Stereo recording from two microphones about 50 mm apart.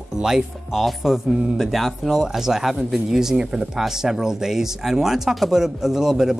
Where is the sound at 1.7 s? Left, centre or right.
Centre.